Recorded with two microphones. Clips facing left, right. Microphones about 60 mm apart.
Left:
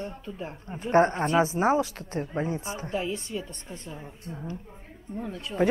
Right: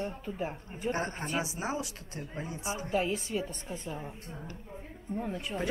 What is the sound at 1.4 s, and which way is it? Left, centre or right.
A woman's voice, left.